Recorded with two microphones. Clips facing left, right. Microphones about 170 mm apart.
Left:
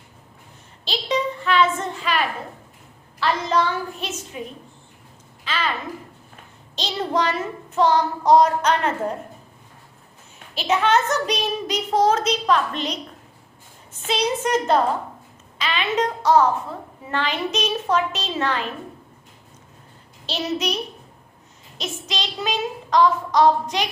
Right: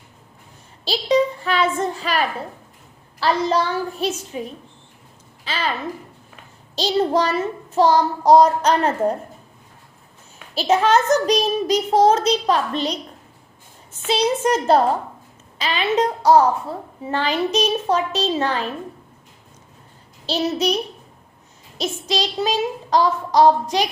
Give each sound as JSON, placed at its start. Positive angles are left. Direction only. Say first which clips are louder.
{"t": 0.9, "sound": "a child's voice", "louder": "right 6 dB", "side_deg": -35}
{"t": 5.5, "sound": "a sound", "louder": "right 1 dB", "side_deg": -35}
{"t": 6.7, "sound": "a woman's voice", "louder": "right 5 dB", "side_deg": -35}
{"t": 10.5, "sound": "a woman's voice", "louder": "right 3 dB", "side_deg": -35}
{"t": 14.1, "sound": "a woman's voice", "louder": "right 3 dB", "side_deg": -35}
{"t": 20.2, "sound": "a woman's voice", "louder": "right 4 dB", "side_deg": -35}
{"t": 21.8, "sound": "a woman's voice", "louder": "right 6 dB", "side_deg": -35}